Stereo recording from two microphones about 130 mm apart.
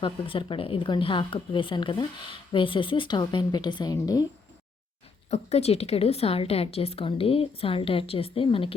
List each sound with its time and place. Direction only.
0.0 s speech: 40° left (ahead or behind)
5.3 s a woman's voice: 55° left (ahead or behind)